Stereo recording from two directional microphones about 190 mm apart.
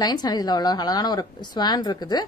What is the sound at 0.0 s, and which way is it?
Speech, 20° left (ahead or behind).